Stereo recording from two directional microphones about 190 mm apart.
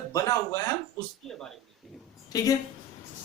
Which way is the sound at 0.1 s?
15° left (ahead or behind).